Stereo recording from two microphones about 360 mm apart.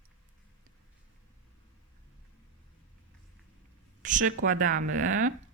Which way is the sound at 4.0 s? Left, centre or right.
Right.